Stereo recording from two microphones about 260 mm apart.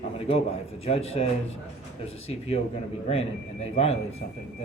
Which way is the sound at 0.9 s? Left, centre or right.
Left.